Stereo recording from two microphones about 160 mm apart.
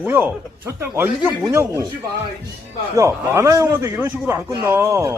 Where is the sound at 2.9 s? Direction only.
20° right (ahead or behind).